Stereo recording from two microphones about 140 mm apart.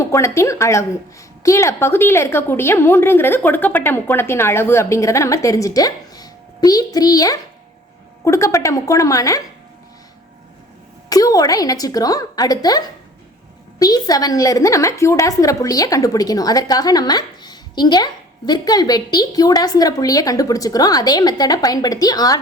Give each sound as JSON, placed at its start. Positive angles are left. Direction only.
{"t": 0.0, "sound": "a woman's voice", "side_deg": 20}
{"t": 11.1, "sound": "a woman's voice", "side_deg": 25}